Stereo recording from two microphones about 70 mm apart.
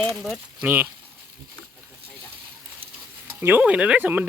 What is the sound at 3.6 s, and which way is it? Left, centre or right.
Speech, centre.